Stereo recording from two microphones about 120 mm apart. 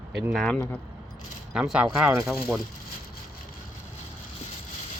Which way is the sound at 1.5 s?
5° right (ahead or behind).